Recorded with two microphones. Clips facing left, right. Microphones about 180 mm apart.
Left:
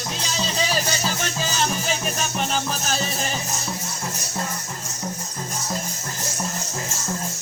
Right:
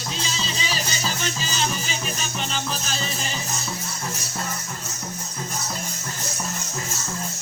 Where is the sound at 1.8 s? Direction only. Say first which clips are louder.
Left 4 dB; 55° left (ahead or behind).